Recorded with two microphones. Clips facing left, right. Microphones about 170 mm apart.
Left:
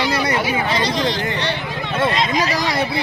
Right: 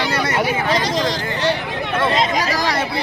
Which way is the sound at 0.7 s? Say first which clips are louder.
Right 1 dB; 40° right (ahead or behind).